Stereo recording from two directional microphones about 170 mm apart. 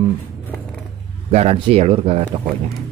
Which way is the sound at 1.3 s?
40° right (ahead or behind).